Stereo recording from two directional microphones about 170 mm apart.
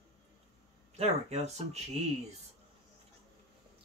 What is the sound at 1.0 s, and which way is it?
Speech, 40° right (ahead or behind).